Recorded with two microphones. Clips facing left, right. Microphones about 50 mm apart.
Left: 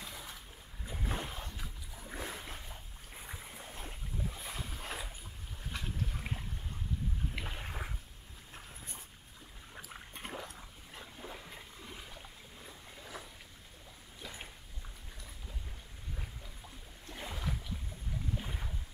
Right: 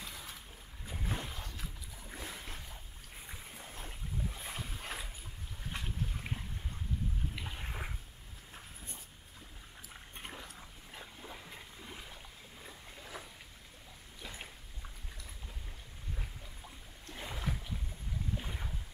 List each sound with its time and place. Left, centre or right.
0.0 s boat: centre
1.2 s boat: centre
5.7 s boat: right
6.0 s boat: centre
7.3 s boat: centre
7.6 s a sound: centre
10.1 s boat: centre
11.1 s a sound: centre
11.8 s boat: centre
12.6 s vehicle: centre
14.2 s boat: centre
17.0 s boat: centre